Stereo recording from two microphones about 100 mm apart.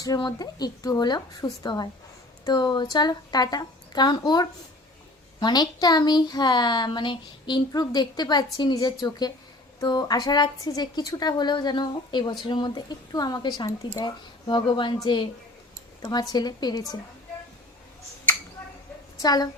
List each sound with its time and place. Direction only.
0.2 s a woman's voice: 45° left (ahead or behind)
19.2 s a woman's voice: 40° left (ahead or behind)